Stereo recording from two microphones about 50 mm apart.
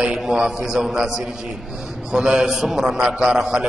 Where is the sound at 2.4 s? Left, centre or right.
Centre.